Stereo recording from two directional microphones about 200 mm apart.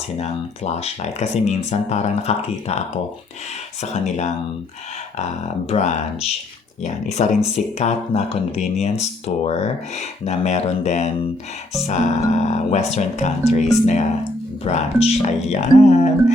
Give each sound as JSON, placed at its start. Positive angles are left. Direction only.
{"t": 0.2, "sound": "speech", "side_deg": 35}